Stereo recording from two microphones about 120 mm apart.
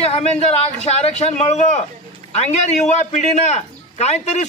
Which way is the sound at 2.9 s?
70° left (ahead or behind).